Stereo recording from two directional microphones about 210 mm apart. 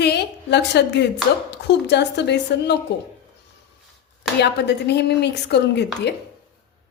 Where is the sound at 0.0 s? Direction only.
50° left (ahead or behind).